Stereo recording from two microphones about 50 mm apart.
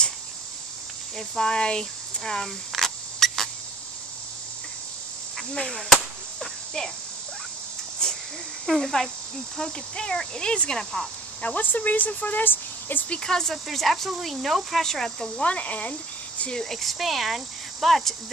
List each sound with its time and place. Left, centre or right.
1.1 s a sound: centre
5.5 s cricket: centre
6.4 s a sound: centre
8.0 s a sound: centre
8.6 s cricket: centre
11.4 s speech: left
13.2 s cricket: centre
13.7 s speech: centre
14.9 s cricket: centre
15.4 s speech: left
16.5 s speech: centre